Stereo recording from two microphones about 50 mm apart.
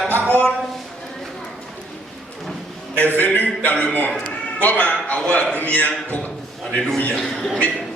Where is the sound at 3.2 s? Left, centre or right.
Left.